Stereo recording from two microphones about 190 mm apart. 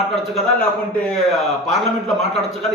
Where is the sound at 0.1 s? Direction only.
Centre (ahead or behind).